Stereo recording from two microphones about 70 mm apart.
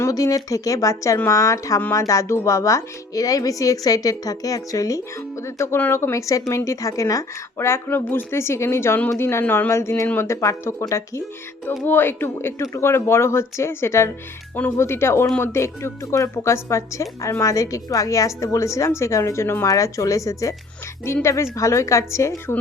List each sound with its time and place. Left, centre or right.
0.1 s a woman's voice: left
5.4 s a woman's voice: left
11.9 s a woman's voice: left
19.6 s a woman's voice: left
21.0 s a woman's voice: left